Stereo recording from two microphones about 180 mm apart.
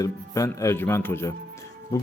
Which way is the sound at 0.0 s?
15° left (ahead or behind).